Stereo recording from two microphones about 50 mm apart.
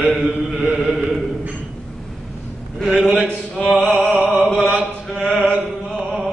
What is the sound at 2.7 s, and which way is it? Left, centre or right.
Speech, centre.